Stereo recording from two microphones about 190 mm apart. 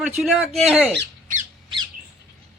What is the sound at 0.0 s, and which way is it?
Speech, centre (ahead or behind).